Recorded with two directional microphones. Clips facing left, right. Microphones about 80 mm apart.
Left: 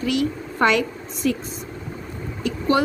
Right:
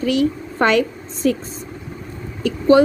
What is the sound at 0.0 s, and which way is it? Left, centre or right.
Speech, right.